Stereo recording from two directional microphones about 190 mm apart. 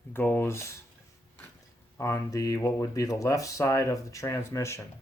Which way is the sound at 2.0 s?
15° left (ahead or behind).